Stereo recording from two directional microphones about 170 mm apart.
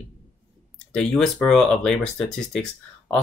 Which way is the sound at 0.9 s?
5° left (ahead or behind).